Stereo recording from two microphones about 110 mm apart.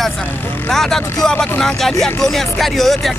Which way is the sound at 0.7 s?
5° left (ahead or behind).